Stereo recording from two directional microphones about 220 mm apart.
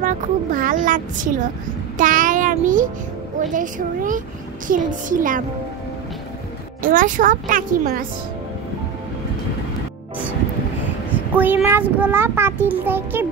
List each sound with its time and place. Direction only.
0.0 s speech: 35° right (ahead or behind)
2.0 s child singing: 35° right (ahead or behind)
3.5 s speech: 35° right (ahead or behind)
6.8 s speech: 40° right (ahead or behind)
11.3 s a child's voice: 10° right (ahead or behind)